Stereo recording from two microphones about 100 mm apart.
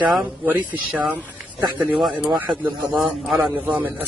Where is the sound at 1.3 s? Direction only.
5° right (ahead or behind).